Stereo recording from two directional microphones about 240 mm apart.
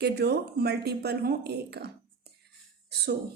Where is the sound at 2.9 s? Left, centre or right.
Right.